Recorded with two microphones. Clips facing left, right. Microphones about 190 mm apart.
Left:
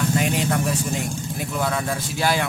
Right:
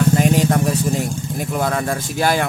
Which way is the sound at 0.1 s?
40° right (ahead or behind).